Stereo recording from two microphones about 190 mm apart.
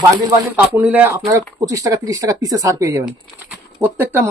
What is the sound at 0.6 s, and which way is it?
Speech, 10° right (ahead or behind).